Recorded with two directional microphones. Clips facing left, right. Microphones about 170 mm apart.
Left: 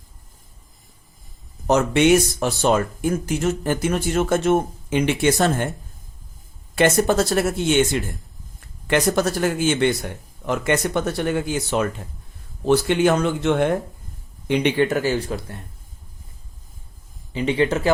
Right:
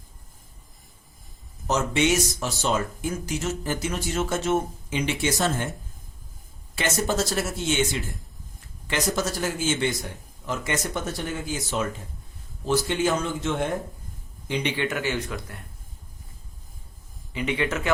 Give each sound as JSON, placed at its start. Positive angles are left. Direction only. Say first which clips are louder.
{"t": 1.6, "sound": "speech", "louder": "left 7 dB", "side_deg": 60}
{"t": 6.7, "sound": "speech", "louder": "left 8 dB", "side_deg": 55}
{"t": 14.8, "sound": "speech", "louder": "left 7 dB", "side_deg": 35}
{"t": 17.3, "sound": "speech", "louder": "left 6 dB", "side_deg": 30}